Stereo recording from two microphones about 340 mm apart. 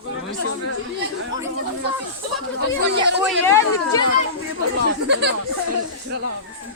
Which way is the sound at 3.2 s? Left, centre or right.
Centre.